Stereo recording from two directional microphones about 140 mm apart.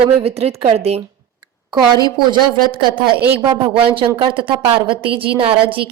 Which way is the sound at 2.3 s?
35° right (ahead or behind).